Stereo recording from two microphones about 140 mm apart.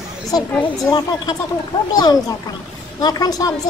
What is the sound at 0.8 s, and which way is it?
Speech, 30° left (ahead or behind).